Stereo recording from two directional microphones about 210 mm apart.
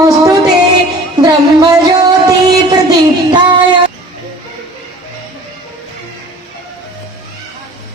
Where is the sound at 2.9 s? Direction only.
20° right (ahead or behind).